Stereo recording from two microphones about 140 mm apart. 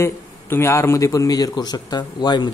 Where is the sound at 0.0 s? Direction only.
20° left (ahead or behind).